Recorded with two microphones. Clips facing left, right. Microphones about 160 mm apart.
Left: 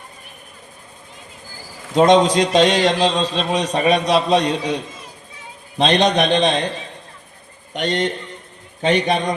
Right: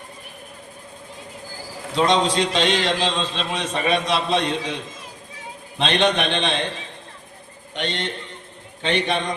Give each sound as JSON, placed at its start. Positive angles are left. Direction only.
{"t": 1.9, "sound": "a man's voice", "side_deg": 45}
{"t": 7.7, "sound": "a man's voice", "side_deg": 40}